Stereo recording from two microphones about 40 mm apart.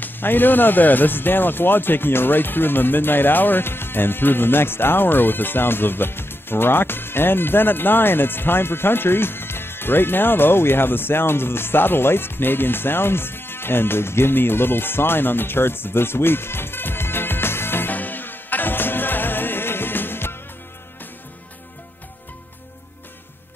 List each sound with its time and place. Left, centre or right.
0.0 s speech: left
17.9 s music: left